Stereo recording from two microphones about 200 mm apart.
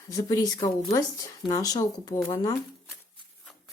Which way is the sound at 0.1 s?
15° left (ahead or behind).